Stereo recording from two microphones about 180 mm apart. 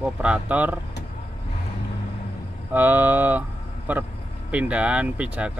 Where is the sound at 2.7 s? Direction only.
10° right (ahead or behind).